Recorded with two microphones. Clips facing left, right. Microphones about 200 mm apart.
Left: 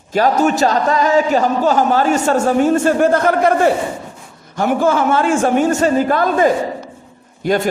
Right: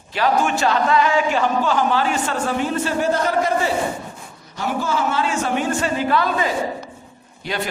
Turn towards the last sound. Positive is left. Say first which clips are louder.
# left 10 dB
turn(degrees=45)  # may be behind; listen again after turning